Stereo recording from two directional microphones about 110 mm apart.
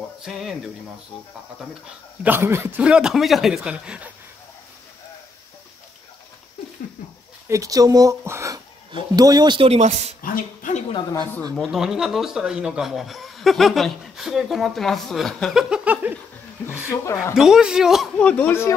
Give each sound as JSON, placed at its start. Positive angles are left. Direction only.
{"t": 0.2, "sound": "speech", "side_deg": 0}
{"t": 2.2, "sound": "speech", "side_deg": -20}
{"t": 2.8, "sound": "a man's voice", "side_deg": -5}
{"t": 7.4, "sound": "speech", "side_deg": -30}
{"t": 8.9, "sound": "speech", "side_deg": -35}
{"t": 9.6, "sound": "speech", "side_deg": -80}
{"t": 11.6, "sound": "speech", "side_deg": -5}
{"t": 15.7, "sound": "a man's voice", "side_deg": -15}
{"t": 16.9, "sound": "speech", "side_deg": 25}
{"t": 17.4, "sound": "speech", "side_deg": -5}
{"t": 18.2, "sound": "speech", "side_deg": 15}